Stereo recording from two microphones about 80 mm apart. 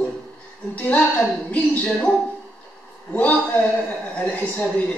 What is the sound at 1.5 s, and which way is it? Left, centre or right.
A man's voice, centre.